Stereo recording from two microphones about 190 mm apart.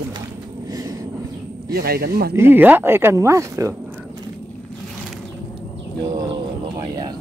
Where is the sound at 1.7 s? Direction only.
55° right (ahead or behind).